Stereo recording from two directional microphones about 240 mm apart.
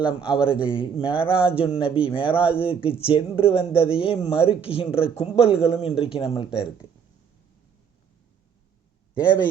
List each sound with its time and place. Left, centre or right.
0.2 s speech: centre
0.6 s speech: left
2.3 s speech: centre
2.6 s speech: left